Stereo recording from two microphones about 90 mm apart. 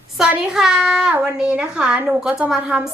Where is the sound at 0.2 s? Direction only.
5° right (ahead or behind).